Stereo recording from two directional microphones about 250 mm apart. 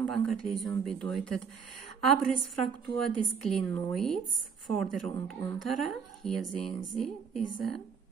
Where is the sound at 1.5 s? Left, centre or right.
Right.